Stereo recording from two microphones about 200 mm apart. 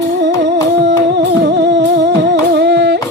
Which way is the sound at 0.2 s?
60° right (ahead or behind).